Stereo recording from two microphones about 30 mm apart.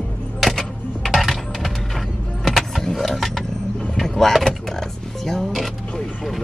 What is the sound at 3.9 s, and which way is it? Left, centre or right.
Vehicle, centre.